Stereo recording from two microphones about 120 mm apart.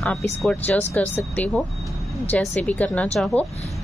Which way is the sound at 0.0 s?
5° left (ahead or behind).